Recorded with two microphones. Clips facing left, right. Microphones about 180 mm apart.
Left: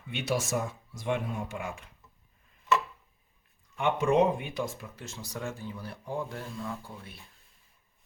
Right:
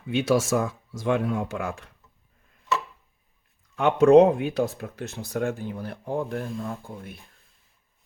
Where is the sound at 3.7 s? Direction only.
75° right (ahead or behind); by 7.1 s 50° right (ahead or behind).